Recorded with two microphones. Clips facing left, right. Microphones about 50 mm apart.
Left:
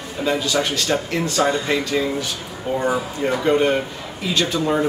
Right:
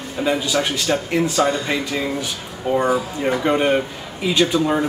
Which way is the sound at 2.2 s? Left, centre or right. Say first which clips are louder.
Right 2 dB; right.